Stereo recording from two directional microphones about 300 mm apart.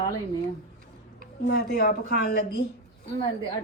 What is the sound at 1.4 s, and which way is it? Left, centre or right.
Speech, left.